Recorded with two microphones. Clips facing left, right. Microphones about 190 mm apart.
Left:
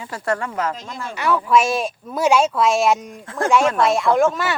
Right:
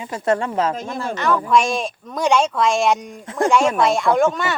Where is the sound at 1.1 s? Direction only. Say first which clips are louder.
Left 1 dB; 10° left (ahead or behind).